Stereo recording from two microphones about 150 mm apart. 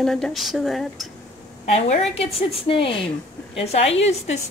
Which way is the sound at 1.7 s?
50° left (ahead or behind).